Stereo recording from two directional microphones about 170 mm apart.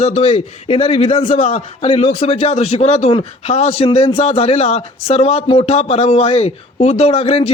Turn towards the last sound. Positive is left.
turn(degrees=35)  # may be behind; listen again after turning